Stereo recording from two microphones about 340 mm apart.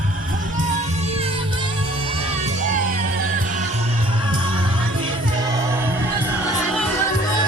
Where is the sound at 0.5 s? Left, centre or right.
Right.